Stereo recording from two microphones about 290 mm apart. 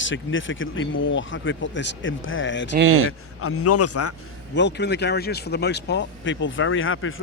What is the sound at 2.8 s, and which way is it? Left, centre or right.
Speech, right.